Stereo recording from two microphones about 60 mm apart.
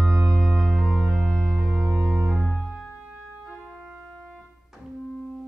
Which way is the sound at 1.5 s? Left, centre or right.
Centre.